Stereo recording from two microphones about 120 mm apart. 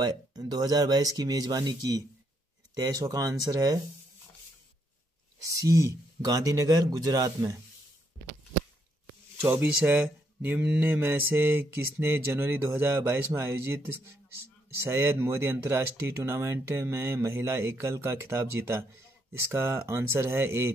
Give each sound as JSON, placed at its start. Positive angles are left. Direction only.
{"t": 0.0, "sound": "speech", "side_deg": -35}
{"t": 5.4, "sound": "mantra", "side_deg": -30}
{"t": 9.4, "sound": "speech", "side_deg": -15}
{"t": 10.4, "sound": "mantra", "side_deg": -15}